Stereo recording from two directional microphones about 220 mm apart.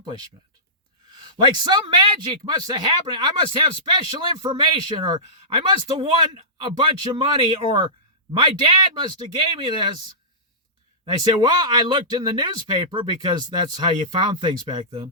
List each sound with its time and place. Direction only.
0.0 s speech: 20° right (ahead or behind)
1.1 s a sound: 20° right (ahead or behind)
1.5 s speech: 20° right (ahead or behind)
11.0 s speech: 20° right (ahead or behind)